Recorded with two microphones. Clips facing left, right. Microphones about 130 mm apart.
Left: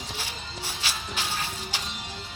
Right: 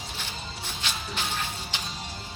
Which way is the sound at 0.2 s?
10° left (ahead or behind).